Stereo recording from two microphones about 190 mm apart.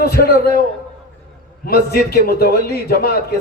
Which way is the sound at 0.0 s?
55° left (ahead or behind).